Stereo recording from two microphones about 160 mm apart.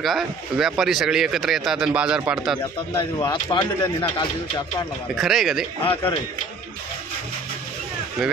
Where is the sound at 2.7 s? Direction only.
30° left (ahead or behind).